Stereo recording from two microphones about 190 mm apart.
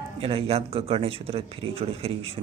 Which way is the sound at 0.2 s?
30° right (ahead or behind).